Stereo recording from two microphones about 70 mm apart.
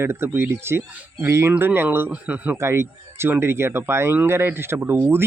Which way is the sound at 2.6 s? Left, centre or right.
Right.